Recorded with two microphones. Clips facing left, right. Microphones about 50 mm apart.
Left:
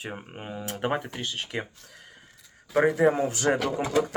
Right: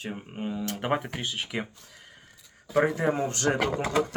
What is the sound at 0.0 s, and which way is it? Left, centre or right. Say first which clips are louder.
Speech: right 3 dB; centre.